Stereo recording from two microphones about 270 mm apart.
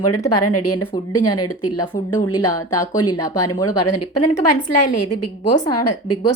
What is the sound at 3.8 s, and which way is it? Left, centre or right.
A woman's voice, left.